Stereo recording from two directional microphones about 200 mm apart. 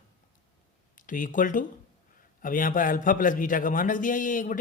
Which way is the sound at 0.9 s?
40° left (ahead or behind).